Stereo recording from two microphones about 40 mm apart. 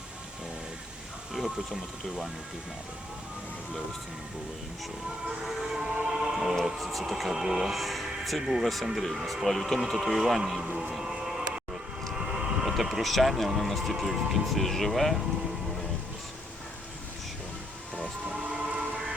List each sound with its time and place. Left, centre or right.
5.5 s music: centre
5.8 s music: right
7.1 s speech: centre
10.6 s speech: centre
10.9 s cattle: centre
12.1 s speech: centre
18.3 s music: right